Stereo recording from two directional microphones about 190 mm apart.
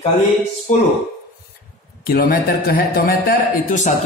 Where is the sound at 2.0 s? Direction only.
50° left (ahead or behind).